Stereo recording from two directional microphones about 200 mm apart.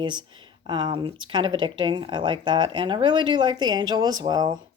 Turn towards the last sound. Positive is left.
turn(degrees=-20)  # may be behind; listen again after turning